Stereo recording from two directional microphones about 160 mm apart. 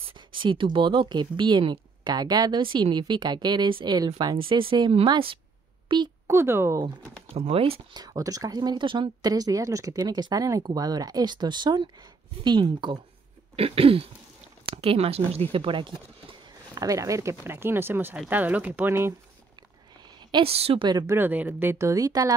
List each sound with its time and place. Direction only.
0.0 s speech: 30° right (ahead or behind)
6.2 s speech: 15° right (ahead or behind)
7.3 s speech: 40° right (ahead or behind)
8.0 s speech: 20° right (ahead or behind)
20.2 s a woman's voice: 30° right (ahead or behind)
21.1 s speech: 10° right (ahead or behind)